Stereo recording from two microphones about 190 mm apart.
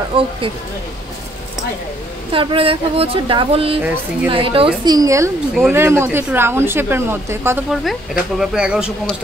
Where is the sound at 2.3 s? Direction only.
30° right (ahead or behind).